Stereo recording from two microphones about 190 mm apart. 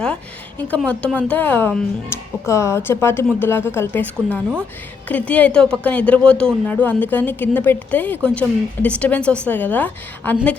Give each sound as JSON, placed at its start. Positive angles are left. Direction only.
{"t": 0.7, "sound": "a woman's voice", "side_deg": 5}